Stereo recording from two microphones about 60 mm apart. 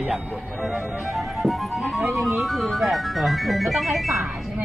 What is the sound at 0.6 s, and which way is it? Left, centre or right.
Speech, centre.